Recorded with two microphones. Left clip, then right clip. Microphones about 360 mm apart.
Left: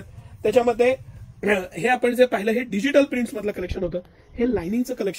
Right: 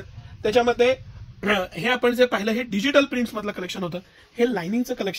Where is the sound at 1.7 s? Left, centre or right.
Right.